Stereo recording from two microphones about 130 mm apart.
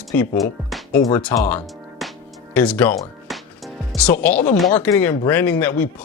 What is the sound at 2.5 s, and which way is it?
Speech, 10° left (ahead or behind).